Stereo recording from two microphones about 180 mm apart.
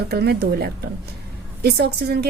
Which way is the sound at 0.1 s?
65° right (ahead or behind).